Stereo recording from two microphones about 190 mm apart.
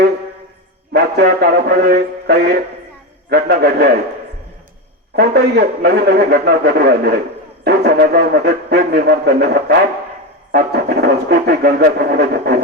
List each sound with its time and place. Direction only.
0.9 s a man's voice: 55° right (ahead or behind)
5.1 s a man's voice: 60° right (ahead or behind)